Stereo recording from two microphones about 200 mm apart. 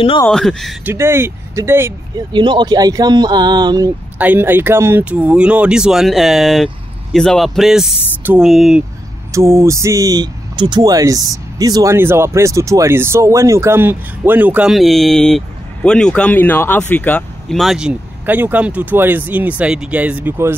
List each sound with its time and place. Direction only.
0.3 s speech: centre (ahead or behind)
0.8 s speech: 10° right (ahead or behind)
2.3 s speech: 20° right (ahead or behind)
4.2 s speech: 10° right (ahead or behind)
9.3 s speech: 15° right (ahead or behind)